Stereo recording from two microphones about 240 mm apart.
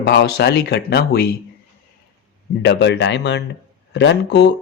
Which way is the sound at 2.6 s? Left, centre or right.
Left.